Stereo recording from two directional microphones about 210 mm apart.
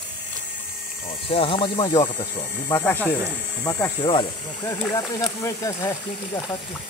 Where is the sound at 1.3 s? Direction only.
25° left (ahead or behind).